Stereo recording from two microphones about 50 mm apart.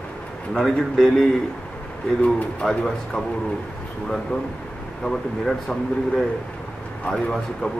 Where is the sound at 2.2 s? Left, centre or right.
Left.